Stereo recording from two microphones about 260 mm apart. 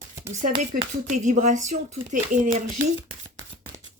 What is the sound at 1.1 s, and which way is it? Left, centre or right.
Speech, right.